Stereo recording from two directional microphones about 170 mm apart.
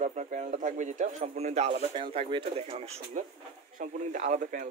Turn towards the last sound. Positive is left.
turn(degrees=-50)  # may be behind; listen again after turning